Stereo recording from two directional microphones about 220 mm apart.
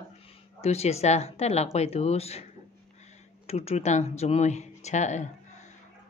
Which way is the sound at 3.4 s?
30° left (ahead or behind).